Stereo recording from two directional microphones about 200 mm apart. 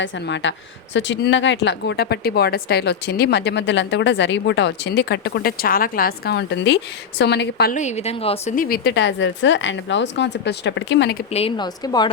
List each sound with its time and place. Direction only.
0.0 s speech: 65° left (ahead or behind)
7.8 s speech: 35° left (ahead or behind)
8.5 s speech: 45° left (ahead or behind)
11.3 s a woman's voice: 30° left (ahead or behind)